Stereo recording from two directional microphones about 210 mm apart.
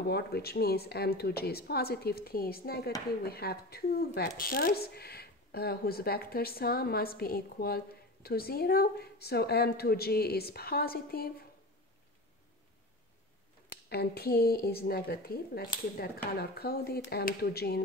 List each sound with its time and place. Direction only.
0.0 s speech: 50° left (ahead or behind)
13.7 s speech: 50° left (ahead or behind)